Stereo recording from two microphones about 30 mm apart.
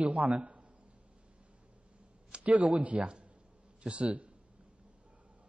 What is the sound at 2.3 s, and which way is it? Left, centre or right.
Speech, right.